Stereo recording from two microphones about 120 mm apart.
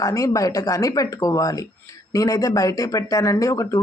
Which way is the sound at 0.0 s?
30° left (ahead or behind).